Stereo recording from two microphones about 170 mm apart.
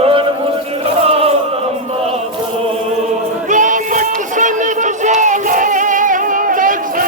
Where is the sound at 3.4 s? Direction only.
50° right (ahead or behind).